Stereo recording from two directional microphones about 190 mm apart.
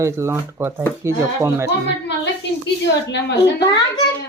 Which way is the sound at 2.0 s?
65° left (ahead or behind).